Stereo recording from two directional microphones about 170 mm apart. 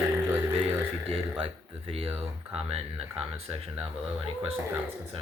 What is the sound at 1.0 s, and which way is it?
Speech, 35° right (ahead or behind).